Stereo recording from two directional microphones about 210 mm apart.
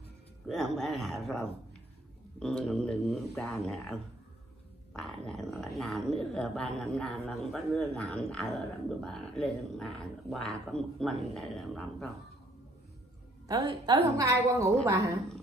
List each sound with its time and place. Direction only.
0.5 s speech: centre (ahead or behind)
13.5 s a woman's voice: 15° right (ahead or behind)